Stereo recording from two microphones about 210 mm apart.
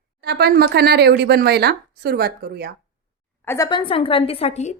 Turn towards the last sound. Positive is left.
turn(degrees=30)  # may be behind; listen again after turning